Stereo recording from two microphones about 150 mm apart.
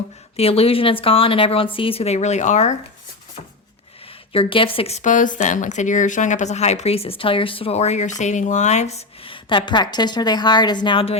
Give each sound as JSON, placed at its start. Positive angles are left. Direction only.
{"t": 0.3, "sound": "a woman's voice", "side_deg": 40}
{"t": 4.3, "sound": "a woman's voice", "side_deg": 35}